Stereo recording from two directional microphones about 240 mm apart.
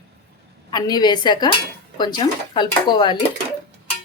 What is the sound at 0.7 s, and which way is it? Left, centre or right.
Speech, centre.